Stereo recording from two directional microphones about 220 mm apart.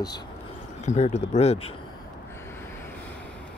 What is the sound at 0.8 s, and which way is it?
Speech, 30° left (ahead or behind).